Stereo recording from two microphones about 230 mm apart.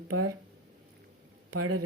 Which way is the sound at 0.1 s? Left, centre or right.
Right.